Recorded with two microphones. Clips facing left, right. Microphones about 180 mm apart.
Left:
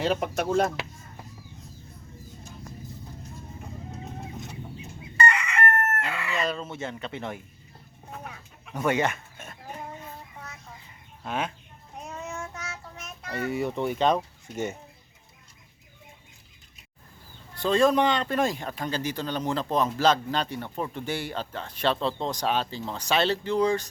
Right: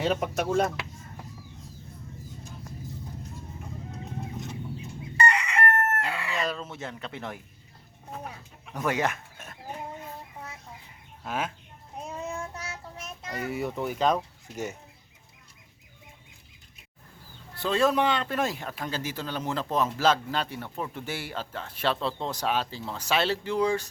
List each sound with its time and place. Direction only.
0.0 s a man's voice: centre (ahead or behind)
5.2 s chicken: 35° right (ahead or behind)
6.3 s speech: centre (ahead or behind)
8.7 s speech: centre (ahead or behind)
11.2 s a man's voice: 5° right (ahead or behind)
12.2 s child singing: 35° right (ahead or behind)
13.3 s a man's voice: centre (ahead or behind)
17.5 s a man's voice: 5° right (ahead or behind)